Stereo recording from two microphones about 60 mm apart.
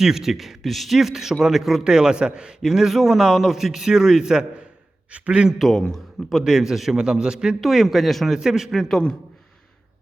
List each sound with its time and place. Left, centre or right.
0.0 s a man's voice: centre
5.7 s a man's voice: centre
6.3 s a man's voice: centre